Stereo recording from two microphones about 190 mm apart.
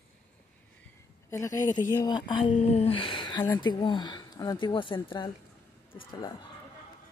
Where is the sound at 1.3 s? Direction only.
15° left (ahead or behind).